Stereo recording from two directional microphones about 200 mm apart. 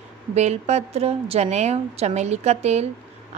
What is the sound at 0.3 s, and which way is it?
A woman's voice, 35° right (ahead or behind).